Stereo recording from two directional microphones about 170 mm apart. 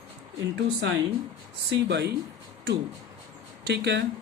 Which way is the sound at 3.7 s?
80° right.